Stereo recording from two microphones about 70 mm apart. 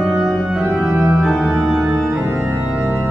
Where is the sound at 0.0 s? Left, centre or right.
Centre.